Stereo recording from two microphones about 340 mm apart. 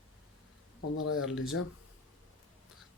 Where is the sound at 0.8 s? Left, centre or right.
Left.